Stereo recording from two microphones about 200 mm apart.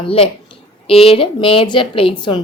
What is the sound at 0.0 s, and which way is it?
A woman's voice, 30° left (ahead or behind).